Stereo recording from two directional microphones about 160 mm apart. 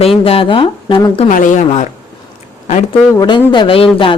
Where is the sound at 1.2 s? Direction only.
50° left (ahead or behind).